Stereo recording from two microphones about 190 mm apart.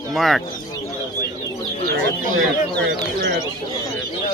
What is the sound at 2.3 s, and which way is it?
Speech, 65° right (ahead or behind).